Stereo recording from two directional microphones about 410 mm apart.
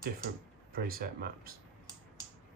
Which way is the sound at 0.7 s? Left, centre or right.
Right.